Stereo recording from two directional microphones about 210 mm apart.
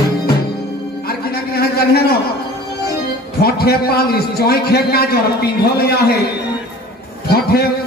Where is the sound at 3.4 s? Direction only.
50° left (ahead or behind).